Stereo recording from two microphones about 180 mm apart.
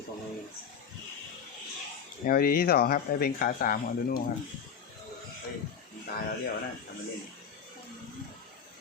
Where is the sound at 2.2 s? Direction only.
55° left (ahead or behind).